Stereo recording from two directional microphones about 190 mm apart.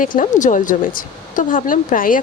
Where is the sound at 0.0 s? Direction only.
45° left (ahead or behind).